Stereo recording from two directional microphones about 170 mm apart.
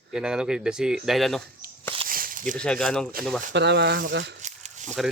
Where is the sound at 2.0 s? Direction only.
55° right (ahead or behind).